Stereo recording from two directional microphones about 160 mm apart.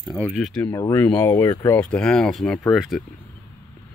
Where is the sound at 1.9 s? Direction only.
5° left (ahead or behind).